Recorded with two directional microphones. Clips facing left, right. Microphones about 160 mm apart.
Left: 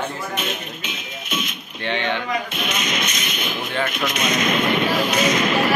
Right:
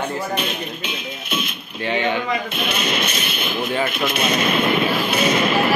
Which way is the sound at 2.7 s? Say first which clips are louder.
Right 3 dB; 30° right (ahead or behind).